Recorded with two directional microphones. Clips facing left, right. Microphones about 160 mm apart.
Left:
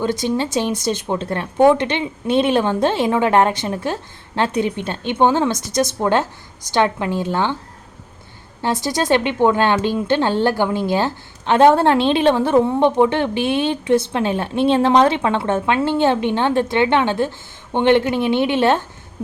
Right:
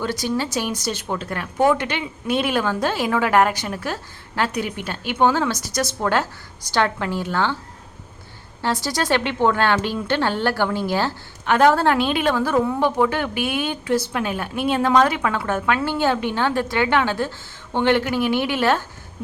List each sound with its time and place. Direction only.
0.0 s speech: 20° left (ahead or behind)
8.6 s speech: 20° left (ahead or behind)